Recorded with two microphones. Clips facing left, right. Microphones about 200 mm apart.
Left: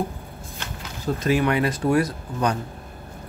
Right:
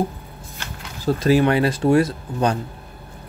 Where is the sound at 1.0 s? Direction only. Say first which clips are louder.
Right 5 dB; 35° right (ahead or behind).